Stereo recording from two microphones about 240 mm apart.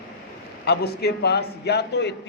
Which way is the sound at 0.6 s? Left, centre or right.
Left.